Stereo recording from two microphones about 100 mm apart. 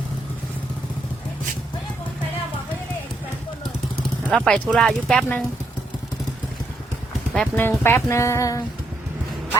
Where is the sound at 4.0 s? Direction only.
10° left (ahead or behind).